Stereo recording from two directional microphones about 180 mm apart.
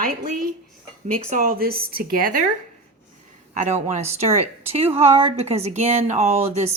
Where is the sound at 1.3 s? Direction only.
45° right (ahead or behind).